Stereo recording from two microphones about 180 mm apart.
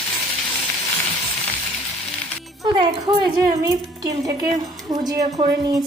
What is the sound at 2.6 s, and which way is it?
Speech, 25° right (ahead or behind).